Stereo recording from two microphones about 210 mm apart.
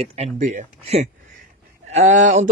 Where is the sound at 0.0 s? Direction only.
30° right (ahead or behind).